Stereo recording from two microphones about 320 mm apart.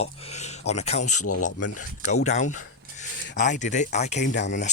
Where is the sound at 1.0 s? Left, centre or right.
Left.